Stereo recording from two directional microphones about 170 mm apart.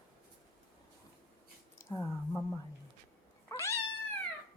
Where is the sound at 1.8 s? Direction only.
20° left (ahead or behind).